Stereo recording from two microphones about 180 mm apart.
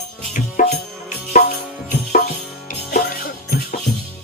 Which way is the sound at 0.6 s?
50° left (ahead or behind).